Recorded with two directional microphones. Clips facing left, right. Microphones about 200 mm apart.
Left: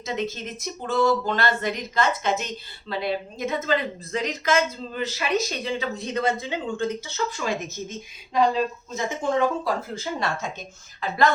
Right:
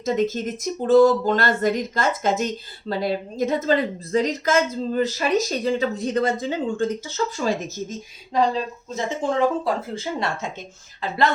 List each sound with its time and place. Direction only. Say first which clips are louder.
0.0 s speech: right 7 dB; 45° right (ahead or behind); by 10.5 s 25° right (ahead or behind)